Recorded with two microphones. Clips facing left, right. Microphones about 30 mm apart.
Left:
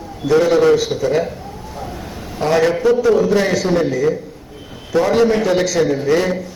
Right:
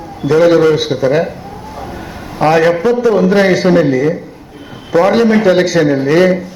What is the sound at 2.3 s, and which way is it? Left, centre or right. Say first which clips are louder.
A man's voice: right 5 dB; right.